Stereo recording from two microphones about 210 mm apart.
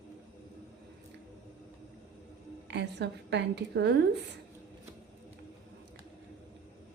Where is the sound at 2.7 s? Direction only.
55° right (ahead or behind).